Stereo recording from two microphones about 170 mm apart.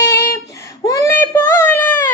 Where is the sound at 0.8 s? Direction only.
20° left (ahead or behind).